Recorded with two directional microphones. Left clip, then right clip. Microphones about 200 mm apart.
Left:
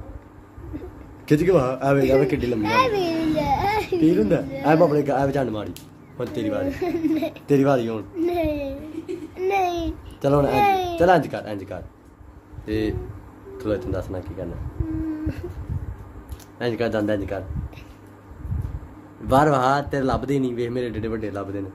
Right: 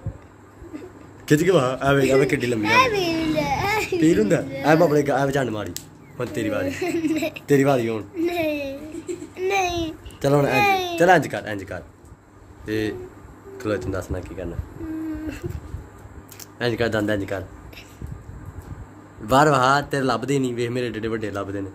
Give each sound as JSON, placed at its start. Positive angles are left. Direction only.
{"t": 1.2, "sound": "a man's voice", "side_deg": -5}
{"t": 2.6, "sound": "a child's voice", "side_deg": 15}
{"t": 4.0, "sound": "a man's voice", "side_deg": -5}
{"t": 6.7, "sound": "speech", "side_deg": 15}
{"t": 7.4, "sound": "a man's voice", "side_deg": -5}
{"t": 8.2, "sound": "a sound", "side_deg": 15}
{"t": 9.4, "sound": "babbling", "side_deg": 15}
{"t": 10.2, "sound": "a man's voice", "side_deg": -5}
{"t": 10.5, "sound": "babbling", "side_deg": 15}
{"t": 11.0, "sound": "a man's voice", "side_deg": -5}
{"t": 16.5, "sound": "a man's voice", "side_deg": -5}
{"t": 19.2, "sound": "a man's voice", "side_deg": -5}